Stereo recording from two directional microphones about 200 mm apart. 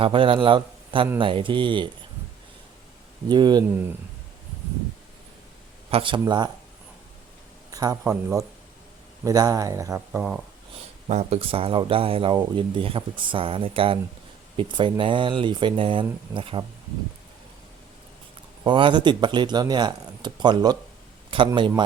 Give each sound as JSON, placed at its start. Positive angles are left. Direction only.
{"t": 0.0, "sound": "speech", "side_deg": -25}
{"t": 3.2, "sound": "speech", "side_deg": -20}
{"t": 5.9, "sound": "speech", "side_deg": -25}
{"t": 7.7, "sound": "speech", "side_deg": -15}
{"t": 11.1, "sound": "speech", "side_deg": -35}
{"t": 18.6, "sound": "a man's voice", "side_deg": -25}